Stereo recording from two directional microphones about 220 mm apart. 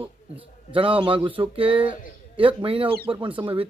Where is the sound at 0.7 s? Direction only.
25° right (ahead or behind).